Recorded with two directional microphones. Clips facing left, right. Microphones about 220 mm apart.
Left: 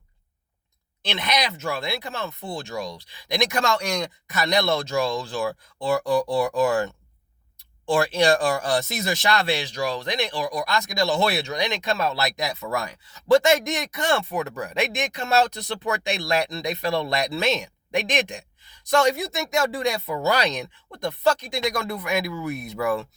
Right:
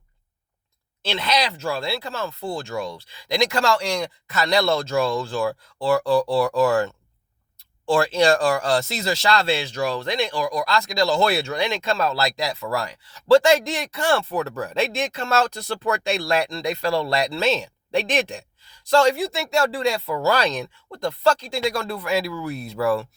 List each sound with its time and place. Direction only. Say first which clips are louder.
1.1 s speech: right 2 dB; 20° left (ahead or behind)